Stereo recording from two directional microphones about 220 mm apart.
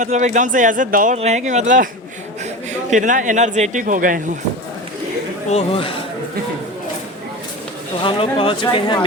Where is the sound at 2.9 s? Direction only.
35° right (ahead or behind).